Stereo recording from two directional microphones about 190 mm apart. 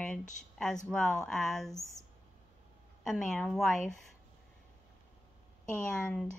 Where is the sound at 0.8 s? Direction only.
5° left (ahead or behind).